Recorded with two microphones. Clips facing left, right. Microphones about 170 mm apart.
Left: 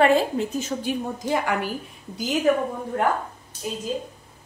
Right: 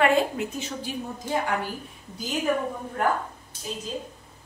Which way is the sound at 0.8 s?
90° left.